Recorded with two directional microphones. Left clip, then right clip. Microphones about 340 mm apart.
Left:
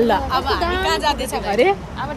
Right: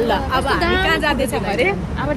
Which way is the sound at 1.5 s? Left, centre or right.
Left.